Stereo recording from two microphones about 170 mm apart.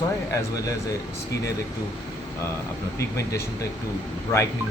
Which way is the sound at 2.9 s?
15° left (ahead or behind).